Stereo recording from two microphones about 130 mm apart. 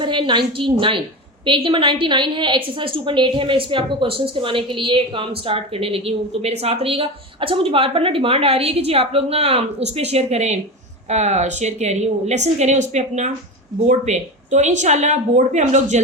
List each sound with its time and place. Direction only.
0.0 s a woman's voice: 40° right (ahead or behind); by 16.0 s 65° right (ahead or behind)